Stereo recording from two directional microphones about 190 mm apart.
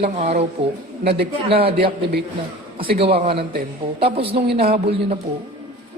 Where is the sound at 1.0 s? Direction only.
60° right (ahead or behind).